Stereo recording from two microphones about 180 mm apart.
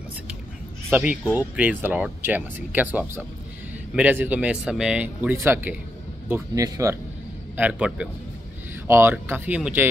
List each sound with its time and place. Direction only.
0.8 s speech: 5° right (ahead or behind)
7.5 s speech: 5° right (ahead or behind)